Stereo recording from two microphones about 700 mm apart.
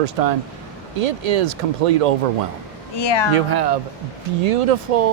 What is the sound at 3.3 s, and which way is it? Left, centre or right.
Speech, right.